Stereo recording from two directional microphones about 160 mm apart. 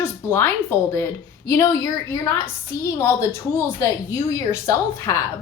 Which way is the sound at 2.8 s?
20° left (ahead or behind).